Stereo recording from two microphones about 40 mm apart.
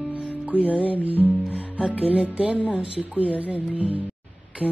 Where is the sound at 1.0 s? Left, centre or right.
Right.